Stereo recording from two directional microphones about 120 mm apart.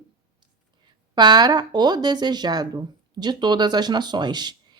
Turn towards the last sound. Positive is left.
turn(degrees=-35)  # may be behind; listen again after turning